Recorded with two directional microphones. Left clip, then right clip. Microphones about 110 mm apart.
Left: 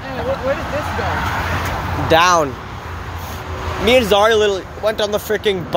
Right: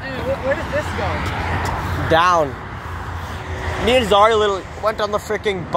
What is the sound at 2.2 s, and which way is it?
Speech, 70° left (ahead or behind).